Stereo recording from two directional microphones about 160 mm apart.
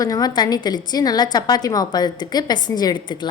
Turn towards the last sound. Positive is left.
turn(degrees=30)  # may be behind; listen again after turning